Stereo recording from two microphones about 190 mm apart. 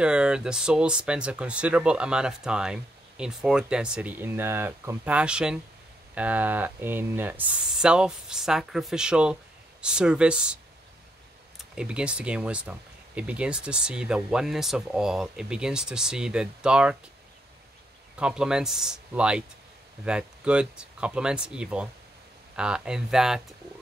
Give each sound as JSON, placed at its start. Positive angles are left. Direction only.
{"t": 0.0, "sound": "speech", "side_deg": -5}
{"t": 18.2, "sound": "speech", "side_deg": -5}